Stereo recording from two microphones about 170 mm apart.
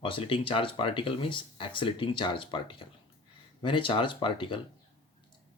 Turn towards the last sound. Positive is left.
turn(degrees=30)  # may be behind; listen again after turning